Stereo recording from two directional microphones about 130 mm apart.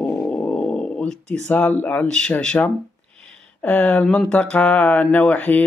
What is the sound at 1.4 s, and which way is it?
Speech, 10° left (ahead or behind).